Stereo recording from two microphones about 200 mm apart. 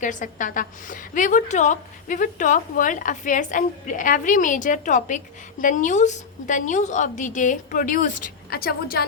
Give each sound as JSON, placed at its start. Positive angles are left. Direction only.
{"t": 0.0, "sound": "a woman's voice", "side_deg": 40}